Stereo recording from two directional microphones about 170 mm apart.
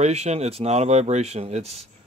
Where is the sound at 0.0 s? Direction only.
40° right (ahead or behind).